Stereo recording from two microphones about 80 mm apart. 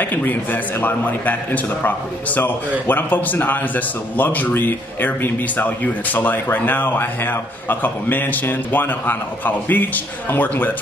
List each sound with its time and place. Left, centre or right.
0.0 s a man's voice: left